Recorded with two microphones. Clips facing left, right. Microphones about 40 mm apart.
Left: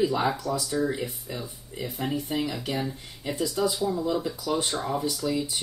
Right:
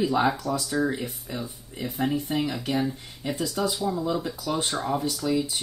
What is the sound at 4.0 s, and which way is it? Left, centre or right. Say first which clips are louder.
Speech: even; centre.